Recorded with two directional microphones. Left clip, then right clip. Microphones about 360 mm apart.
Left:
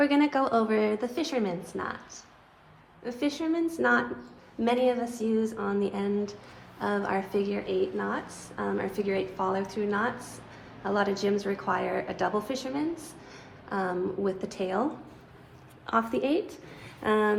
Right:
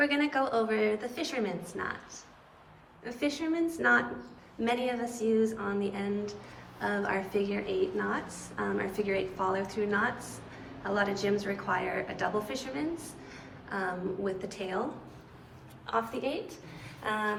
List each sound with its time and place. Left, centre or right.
0.0 s a woman's voice: centre
3.0 s a woman's voice: centre
15.9 s a woman's voice: left